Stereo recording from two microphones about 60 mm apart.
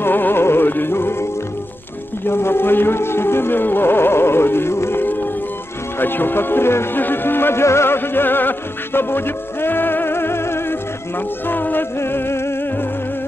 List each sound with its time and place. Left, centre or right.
0.0 s music: left
2.2 s speech: left
5.9 s music: left